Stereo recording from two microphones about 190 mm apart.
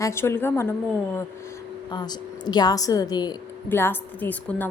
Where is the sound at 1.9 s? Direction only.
20° left (ahead or behind).